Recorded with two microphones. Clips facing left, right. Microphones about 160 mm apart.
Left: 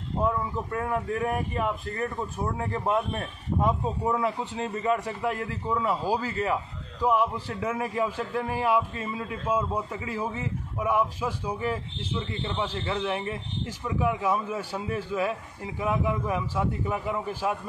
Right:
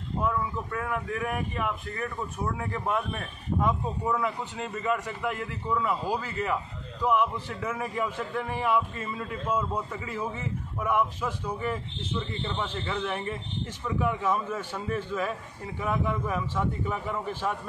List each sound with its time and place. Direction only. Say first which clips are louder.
0.2 s a man's voice: left 2 dB; 30° left (ahead or behind)
11.1 s a man's voice: left 2 dB; 10° left (ahead or behind)
12.5 s a man's voice: left 3 dB; 10° left (ahead or behind)